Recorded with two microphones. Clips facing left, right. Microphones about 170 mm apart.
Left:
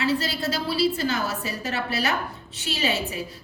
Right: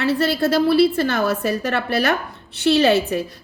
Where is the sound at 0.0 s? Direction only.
60° right (ahead or behind).